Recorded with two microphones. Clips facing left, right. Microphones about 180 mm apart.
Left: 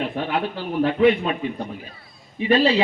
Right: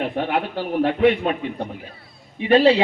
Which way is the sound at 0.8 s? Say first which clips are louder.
Even; 55° right (ahead or behind).